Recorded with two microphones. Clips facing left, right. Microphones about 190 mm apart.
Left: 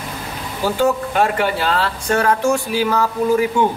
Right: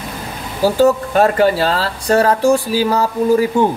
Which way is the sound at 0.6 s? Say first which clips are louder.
Right 5 dB; 40° right (ahead or behind).